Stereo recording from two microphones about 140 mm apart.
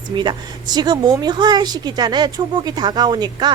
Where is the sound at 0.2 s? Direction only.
30° right (ahead or behind).